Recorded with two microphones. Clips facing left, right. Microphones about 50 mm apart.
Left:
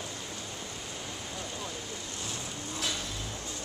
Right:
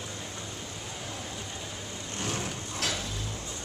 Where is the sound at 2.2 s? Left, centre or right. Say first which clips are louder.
Right 7 dB; right.